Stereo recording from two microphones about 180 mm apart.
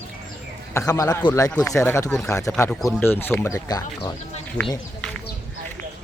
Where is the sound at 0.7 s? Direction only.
15° left (ahead or behind).